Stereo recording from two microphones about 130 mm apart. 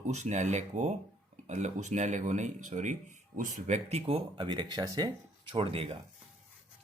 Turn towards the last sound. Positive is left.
turn(degrees=-45)  # may be behind; listen again after turning